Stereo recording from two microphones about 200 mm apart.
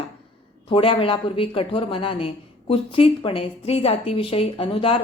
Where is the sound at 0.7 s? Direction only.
25° left (ahead or behind).